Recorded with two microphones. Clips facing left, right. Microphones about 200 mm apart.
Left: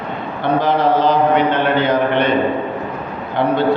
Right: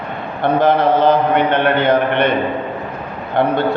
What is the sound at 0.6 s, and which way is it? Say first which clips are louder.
A man's voice: right 3 dB; 55° right (ahead or behind).